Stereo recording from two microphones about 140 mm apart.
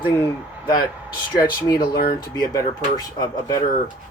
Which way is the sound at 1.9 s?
90° left.